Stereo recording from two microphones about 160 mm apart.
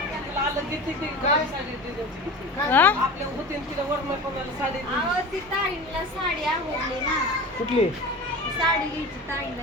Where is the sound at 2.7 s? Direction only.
10° left (ahead or behind).